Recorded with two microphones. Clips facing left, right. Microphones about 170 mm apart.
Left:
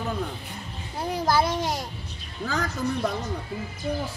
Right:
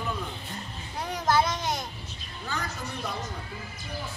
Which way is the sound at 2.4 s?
90° left.